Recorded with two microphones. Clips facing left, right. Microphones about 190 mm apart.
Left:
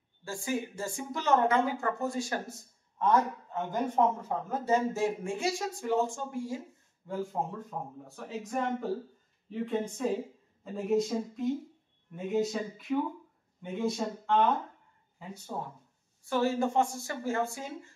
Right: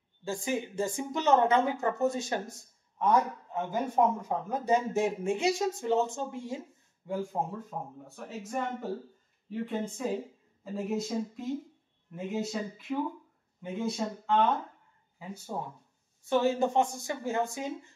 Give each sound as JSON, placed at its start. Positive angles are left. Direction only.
{"t": 0.2, "sound": "speech", "side_deg": -20}
{"t": 3.0, "sound": "speech", "side_deg": -10}
{"t": 10.0, "sound": "speech", "side_deg": -5}
{"t": 16.3, "sound": "speech", "side_deg": -20}